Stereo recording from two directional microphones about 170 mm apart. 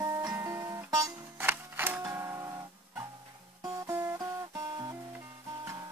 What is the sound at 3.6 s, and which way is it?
Music, 15° right (ahead or behind).